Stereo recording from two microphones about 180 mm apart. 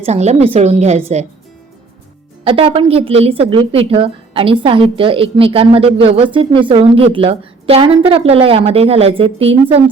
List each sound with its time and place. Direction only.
0.0 s a woman's voice: 35° right (ahead or behind)
2.4 s a woman's voice: 30° right (ahead or behind)